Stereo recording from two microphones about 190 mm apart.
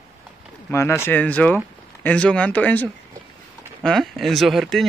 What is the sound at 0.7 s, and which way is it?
Speech, 15° left (ahead or behind).